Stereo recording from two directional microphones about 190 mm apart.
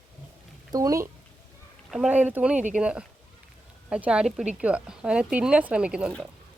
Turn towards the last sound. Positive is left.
turn(degrees=0)  # may be behind; listen again after turning